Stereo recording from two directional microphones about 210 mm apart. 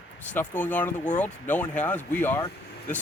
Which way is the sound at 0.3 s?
10° left (ahead or behind).